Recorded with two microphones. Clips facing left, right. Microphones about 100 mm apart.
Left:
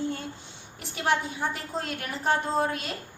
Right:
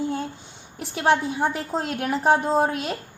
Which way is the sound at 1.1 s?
50° right (ahead or behind).